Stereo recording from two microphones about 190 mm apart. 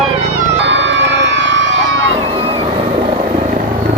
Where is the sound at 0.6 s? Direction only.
70° right (ahead or behind).